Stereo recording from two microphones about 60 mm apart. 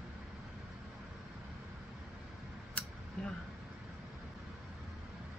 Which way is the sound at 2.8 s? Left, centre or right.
Centre.